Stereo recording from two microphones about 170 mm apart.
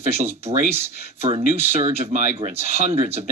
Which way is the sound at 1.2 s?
40° right (ahead or behind).